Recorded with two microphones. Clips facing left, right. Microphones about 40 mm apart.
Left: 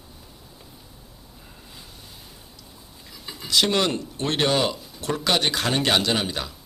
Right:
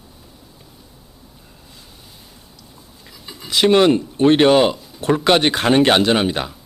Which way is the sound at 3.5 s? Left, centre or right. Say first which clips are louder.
Right 8 dB; right.